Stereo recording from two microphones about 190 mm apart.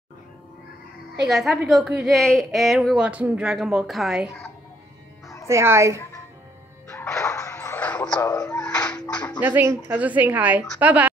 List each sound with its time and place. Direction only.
1.3 s a woman's voice: centre (ahead or behind)
5.5 s a woman's voice: 15° right (ahead or behind)
6.9 s music: 15° left (ahead or behind)
8.3 s a child's voice: 20° left (ahead or behind)
8.5 s bathtub: 5° left (ahead or behind)
9.4 s a woman's voice: 10° right (ahead or behind)